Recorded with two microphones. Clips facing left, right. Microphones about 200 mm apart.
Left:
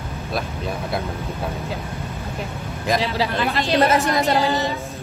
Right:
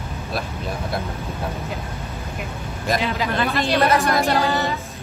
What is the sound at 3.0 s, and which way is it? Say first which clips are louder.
Speech: left 1 dB; 35° left (ahead or behind).